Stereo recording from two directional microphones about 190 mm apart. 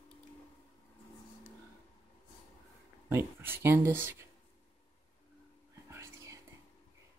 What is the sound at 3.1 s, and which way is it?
Speech, 10° right (ahead or behind).